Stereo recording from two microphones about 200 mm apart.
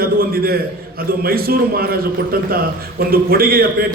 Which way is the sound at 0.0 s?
50° right (ahead or behind).